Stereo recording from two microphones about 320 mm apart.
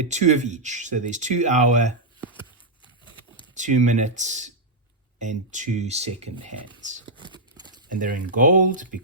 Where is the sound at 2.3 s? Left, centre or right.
Centre.